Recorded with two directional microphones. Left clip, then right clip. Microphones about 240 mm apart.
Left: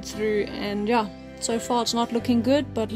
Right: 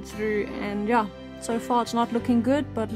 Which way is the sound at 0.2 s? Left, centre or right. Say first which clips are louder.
Left 2 dB; centre.